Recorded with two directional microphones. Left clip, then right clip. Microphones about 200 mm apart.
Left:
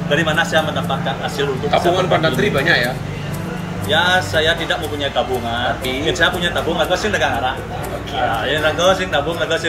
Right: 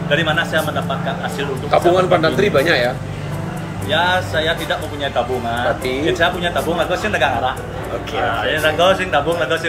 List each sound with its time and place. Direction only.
0.1 s speech: 10° left (ahead or behind)
1.7 s speech: 25° right (ahead or behind)
3.9 s speech: 5° left (ahead or behind)
8.5 s speech: 5° left (ahead or behind)